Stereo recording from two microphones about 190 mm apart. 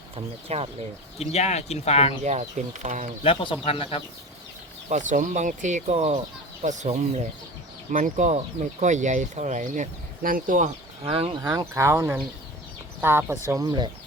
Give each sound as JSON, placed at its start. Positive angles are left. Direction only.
{"t": 0.4, "sound": "speech", "side_deg": -30}
{"t": 1.2, "sound": "speech", "side_deg": 35}
{"t": 2.2, "sound": "speech", "side_deg": -35}
{"t": 3.2, "sound": "speech", "side_deg": 25}
{"t": 4.9, "sound": "speech", "side_deg": -40}
{"t": 11.0, "sound": "speech", "side_deg": -30}
{"t": 11.3, "sound": "speech", "side_deg": -20}